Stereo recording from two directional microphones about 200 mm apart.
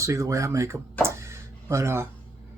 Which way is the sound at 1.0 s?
15° right (ahead or behind).